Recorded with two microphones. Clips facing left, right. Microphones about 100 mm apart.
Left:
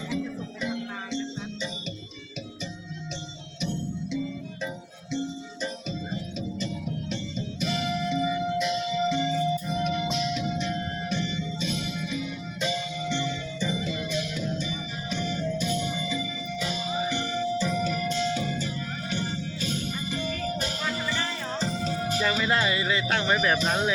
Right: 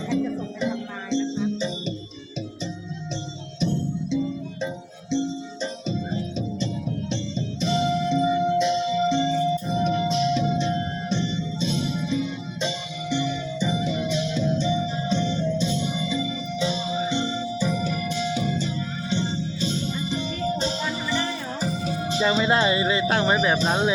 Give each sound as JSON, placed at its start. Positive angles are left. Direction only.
{"t": 0.6, "sound": "music", "side_deg": -30}
{"t": 3.6, "sound": "music", "side_deg": -35}
{"t": 6.1, "sound": "music", "side_deg": -30}
{"t": 13.1, "sound": "music", "side_deg": -15}
{"t": 23.6, "sound": "speech", "side_deg": -30}